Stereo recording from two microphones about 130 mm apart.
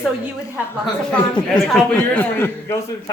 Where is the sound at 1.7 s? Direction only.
10° left (ahead or behind).